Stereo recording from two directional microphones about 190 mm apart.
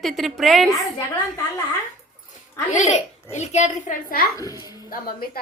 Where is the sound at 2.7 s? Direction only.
40° left (ahead or behind).